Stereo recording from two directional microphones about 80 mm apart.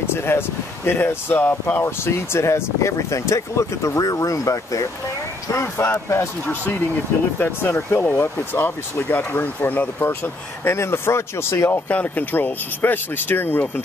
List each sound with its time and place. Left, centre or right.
0.0 s speech: left
5.5 s speech: left
11.9 s speech: centre